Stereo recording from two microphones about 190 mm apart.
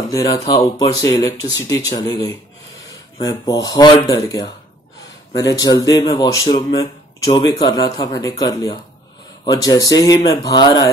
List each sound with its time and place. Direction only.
0.1 s speech: 20° left (ahead or behind)
2.9 s a sound: 20° left (ahead or behind)
3.6 s speech: 20° left (ahead or behind)